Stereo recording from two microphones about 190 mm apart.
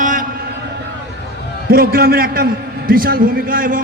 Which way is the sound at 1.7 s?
50° right (ahead or behind).